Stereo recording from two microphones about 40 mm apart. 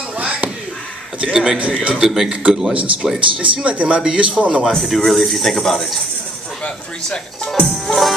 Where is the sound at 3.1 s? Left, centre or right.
Right.